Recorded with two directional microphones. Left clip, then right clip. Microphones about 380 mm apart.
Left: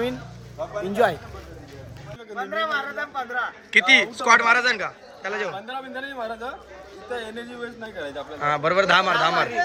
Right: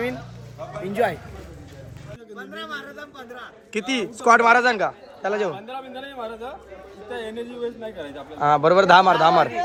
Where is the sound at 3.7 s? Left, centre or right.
Centre.